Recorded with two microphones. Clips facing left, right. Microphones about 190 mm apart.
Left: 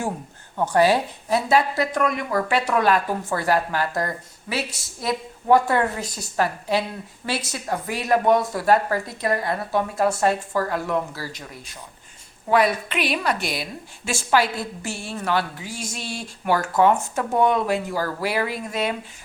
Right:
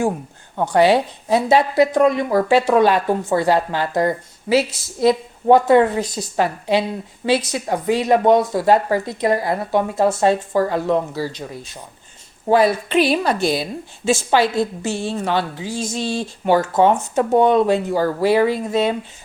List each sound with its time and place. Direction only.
0.5 s a woman's voice: 15° right (ahead or behind)